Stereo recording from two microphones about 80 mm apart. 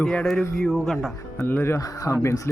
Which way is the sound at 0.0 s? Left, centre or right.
Centre.